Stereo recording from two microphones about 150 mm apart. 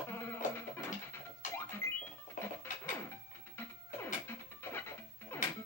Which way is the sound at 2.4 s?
15° left (ahead or behind).